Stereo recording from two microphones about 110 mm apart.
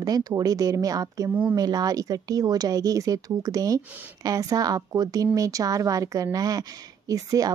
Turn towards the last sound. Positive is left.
turn(degrees=-35)  # may be behind; listen again after turning